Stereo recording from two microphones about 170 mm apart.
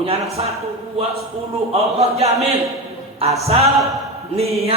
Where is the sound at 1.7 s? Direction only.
40° right (ahead or behind).